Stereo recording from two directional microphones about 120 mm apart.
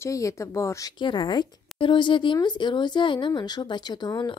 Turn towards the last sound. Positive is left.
turn(degrees=35)  # may be behind; listen again after turning